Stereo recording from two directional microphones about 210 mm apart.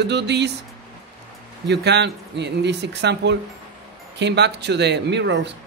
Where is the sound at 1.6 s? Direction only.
55° right (ahead or behind).